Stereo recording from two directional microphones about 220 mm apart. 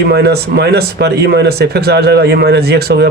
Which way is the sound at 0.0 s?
50° right (ahead or behind).